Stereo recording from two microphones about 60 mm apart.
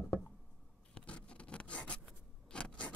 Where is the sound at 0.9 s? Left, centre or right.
Centre.